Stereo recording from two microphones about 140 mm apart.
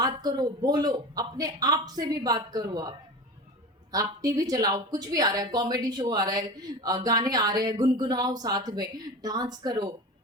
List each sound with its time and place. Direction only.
0.0 s speech: 30° right (ahead or behind)
3.9 s speech: 25° right (ahead or behind)